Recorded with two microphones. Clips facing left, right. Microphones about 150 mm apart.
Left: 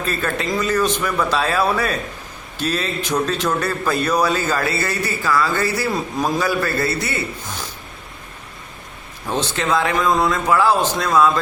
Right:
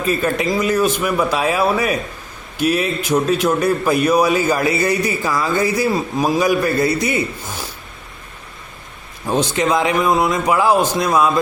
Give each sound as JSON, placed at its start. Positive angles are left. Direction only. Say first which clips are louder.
{"t": 0.0, "sound": "a man's voice", "louder": "right 5 dB", "side_deg": -10}
{"t": 9.2, "sound": "a man's voice", "louder": "right 5 dB", "side_deg": -10}